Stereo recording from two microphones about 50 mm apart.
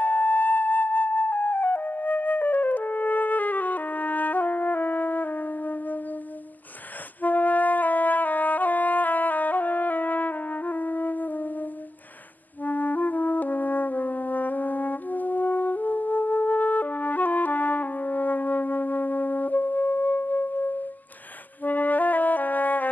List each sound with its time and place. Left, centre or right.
0.0 s music: left
7.2 s music: left